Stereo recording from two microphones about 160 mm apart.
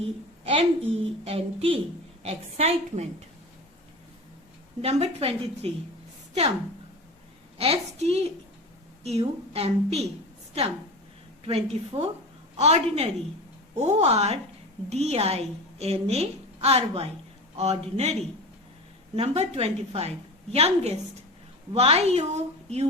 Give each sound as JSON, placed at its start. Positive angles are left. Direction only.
{"t": 0.0, "sound": "a woman's voice", "side_deg": -35}
{"t": 4.8, "sound": "a woman's voice", "side_deg": -40}
{"t": 7.6, "sound": "a woman's voice", "side_deg": -40}
{"t": 11.4, "sound": "a woman's voice", "side_deg": -40}